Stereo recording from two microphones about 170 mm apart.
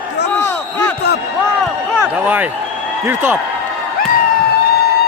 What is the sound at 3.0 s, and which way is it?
Speech, 15° right (ahead or behind).